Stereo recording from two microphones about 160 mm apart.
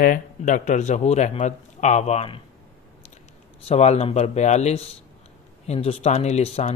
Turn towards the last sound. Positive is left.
turn(degrees=40)  # may be behind; listen again after turning